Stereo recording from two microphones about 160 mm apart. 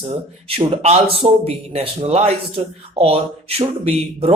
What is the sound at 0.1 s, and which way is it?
Speech, 40° right (ahead or behind).